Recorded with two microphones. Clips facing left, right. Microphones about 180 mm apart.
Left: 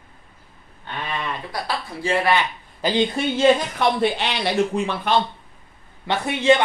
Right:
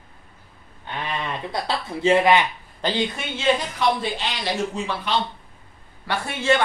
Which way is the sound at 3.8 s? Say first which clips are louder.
Left 3 dB; 65° left (ahead or behind).